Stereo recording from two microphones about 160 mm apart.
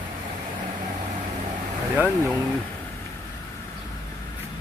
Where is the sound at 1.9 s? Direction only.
10° right (ahead or behind).